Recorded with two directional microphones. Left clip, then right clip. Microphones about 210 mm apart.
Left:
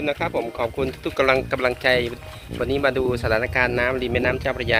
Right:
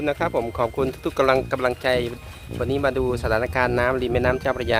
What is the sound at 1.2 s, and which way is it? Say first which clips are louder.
Speech: left 1 dB; 15° right (ahead or behind).